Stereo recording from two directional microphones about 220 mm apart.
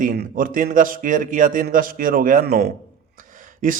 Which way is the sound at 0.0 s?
40° right (ahead or behind).